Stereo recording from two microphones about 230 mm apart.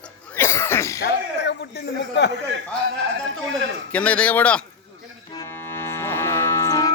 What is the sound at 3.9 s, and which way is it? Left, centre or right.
Speech, centre.